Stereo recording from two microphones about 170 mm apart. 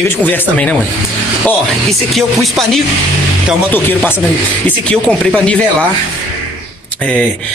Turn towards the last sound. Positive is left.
turn(degrees=5)  # may be behind; listen again after turning